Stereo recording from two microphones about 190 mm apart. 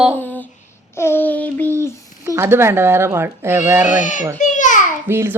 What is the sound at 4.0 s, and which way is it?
Speech, 40° left (ahead or behind).